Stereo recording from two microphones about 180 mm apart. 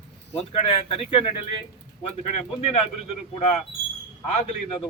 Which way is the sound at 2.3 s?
40° left (ahead or behind).